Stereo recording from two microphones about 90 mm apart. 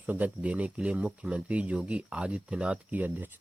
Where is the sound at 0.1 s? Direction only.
15° right (ahead or behind).